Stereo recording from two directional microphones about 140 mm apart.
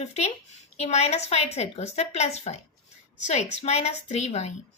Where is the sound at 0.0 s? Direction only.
50° left (ahead or behind).